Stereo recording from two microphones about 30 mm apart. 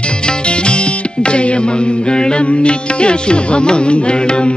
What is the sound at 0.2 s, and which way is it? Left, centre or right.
Music, left.